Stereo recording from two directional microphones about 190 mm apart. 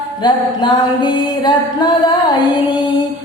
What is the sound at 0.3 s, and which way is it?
Music, 25° left (ahead or behind).